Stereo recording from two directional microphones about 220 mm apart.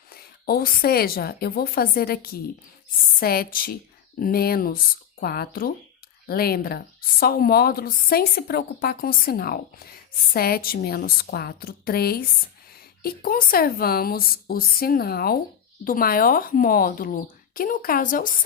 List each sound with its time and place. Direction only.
0.1 s a woman's voice: 45° left (ahead or behind)